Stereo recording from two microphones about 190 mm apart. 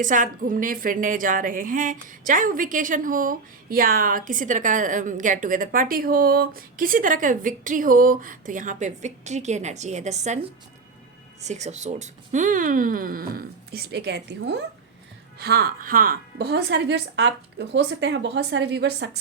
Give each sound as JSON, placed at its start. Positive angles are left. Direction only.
{"t": 0.0, "sound": "a woman's voice", "side_deg": -45}